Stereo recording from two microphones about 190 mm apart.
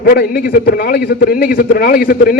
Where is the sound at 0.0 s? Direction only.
50° left (ahead or behind).